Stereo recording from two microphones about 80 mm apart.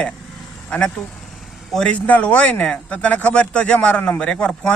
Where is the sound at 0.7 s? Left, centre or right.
Centre.